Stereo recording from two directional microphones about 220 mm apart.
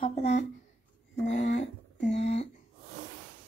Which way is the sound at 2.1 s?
30° left (ahead or behind).